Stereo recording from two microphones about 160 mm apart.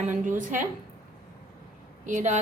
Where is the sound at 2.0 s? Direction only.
50° right (ahead or behind).